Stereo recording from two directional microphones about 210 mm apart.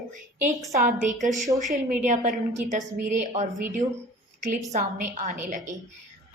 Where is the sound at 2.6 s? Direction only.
35° right (ahead or behind).